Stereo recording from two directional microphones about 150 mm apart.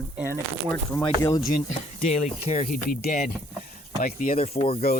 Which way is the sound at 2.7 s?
75° left (ahead or behind).